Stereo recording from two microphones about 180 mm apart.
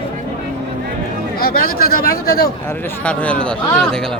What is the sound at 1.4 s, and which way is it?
Speech, 55° left (ahead or behind).